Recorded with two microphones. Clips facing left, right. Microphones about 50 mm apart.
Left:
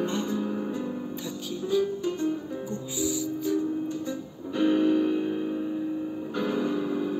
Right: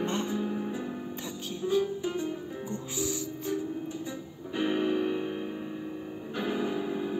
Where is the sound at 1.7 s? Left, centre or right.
Right.